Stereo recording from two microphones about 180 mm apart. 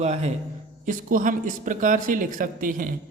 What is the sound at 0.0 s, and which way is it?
Speech, 40° right (ahead or behind).